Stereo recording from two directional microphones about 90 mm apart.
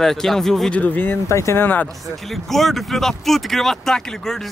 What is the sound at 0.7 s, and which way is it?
Speech, 20° left (ahead or behind).